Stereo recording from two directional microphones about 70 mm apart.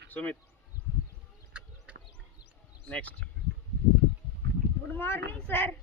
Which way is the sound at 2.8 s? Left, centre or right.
Centre.